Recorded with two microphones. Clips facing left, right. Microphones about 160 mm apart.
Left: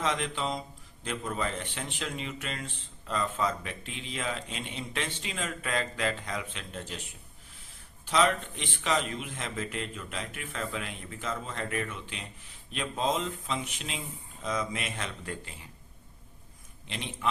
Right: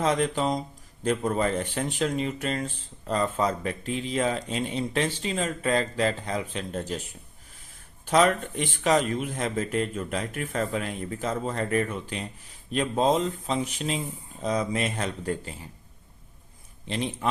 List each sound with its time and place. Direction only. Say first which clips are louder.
0.0 s speech: right 7 dB; 40° right (ahead or behind)
8.0 s speech: right 5 dB; 50° right (ahead or behind)
16.8 s speech: right 9 dB; 35° right (ahead or behind)